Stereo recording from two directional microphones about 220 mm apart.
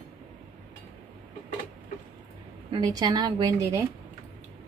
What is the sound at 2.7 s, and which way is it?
A woman's voice, 20° right (ahead or behind).